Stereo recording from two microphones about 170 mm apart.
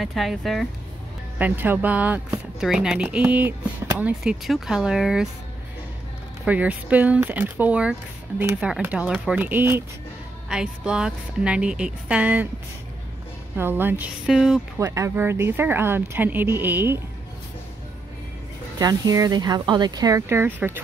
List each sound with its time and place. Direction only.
0.0 s speech: centre (ahead or behind)
1.4 s speech: 10° right (ahead or behind)
6.4 s speech: 10° right (ahead or behind)
13.6 s speech: 10° right (ahead or behind)
14.8 s speech: 15° right (ahead or behind)
18.8 s speech: 20° right (ahead or behind)